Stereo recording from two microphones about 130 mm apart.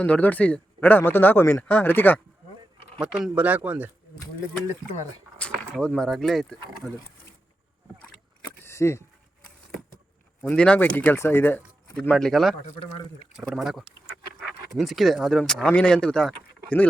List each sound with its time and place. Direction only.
0.0 s speech: 10° left (ahead or behind)
3.0 s speech: 5° right (ahead or behind)
5.4 s a sound: 10° left (ahead or behind)
5.8 s speech: 5° left (ahead or behind)
8.4 s a sound: 15° left (ahead or behind)
10.4 s speech: 5° left (ahead or behind)
12.1 s speech: centre (ahead or behind)